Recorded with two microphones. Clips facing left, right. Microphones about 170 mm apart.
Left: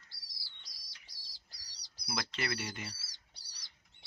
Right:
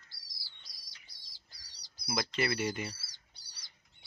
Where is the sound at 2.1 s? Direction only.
20° right (ahead or behind).